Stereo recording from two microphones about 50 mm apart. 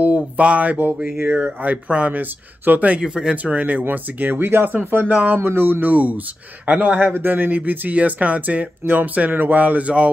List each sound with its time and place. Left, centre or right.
0.0 s speech: right
3.0 s speech: centre
3.5 s speech: right